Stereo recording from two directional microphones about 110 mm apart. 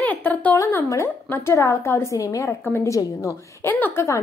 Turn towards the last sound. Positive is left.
turn(degrees=15)  # may be behind; listen again after turning